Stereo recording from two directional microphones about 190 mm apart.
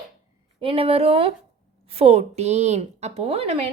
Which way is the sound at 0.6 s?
30° right (ahead or behind).